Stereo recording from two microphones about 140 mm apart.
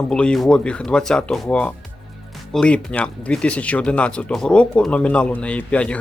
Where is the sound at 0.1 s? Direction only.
5° left (ahead or behind).